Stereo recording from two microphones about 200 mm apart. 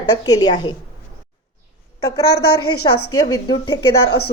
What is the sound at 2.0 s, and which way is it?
A woman's voice, 20° left (ahead or behind).